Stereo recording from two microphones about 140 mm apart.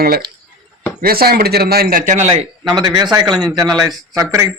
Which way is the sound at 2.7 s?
30° right (ahead or behind).